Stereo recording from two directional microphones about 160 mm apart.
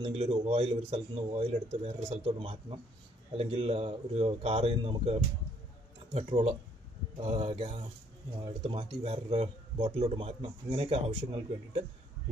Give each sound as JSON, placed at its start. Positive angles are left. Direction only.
{"t": 0.0, "sound": "speech", "side_deg": -35}